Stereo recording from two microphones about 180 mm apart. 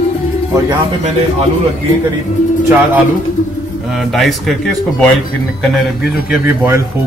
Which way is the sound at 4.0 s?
Centre (ahead or behind).